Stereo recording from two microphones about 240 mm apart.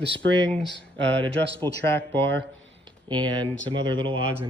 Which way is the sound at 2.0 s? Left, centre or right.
Right.